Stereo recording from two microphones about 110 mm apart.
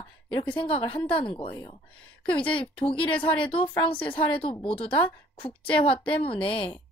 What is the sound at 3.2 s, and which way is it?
A woman's voice, 55° left (ahead or behind).